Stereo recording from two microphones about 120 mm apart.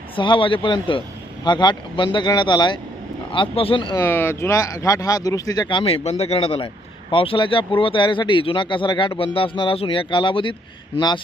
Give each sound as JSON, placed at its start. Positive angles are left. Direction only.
{"t": 0.2, "sound": "speech", "side_deg": 45}
{"t": 3.3, "sound": "speech", "side_deg": 50}
{"t": 3.9, "sound": "speech", "side_deg": 20}
{"t": 5.8, "sound": "speech", "side_deg": 60}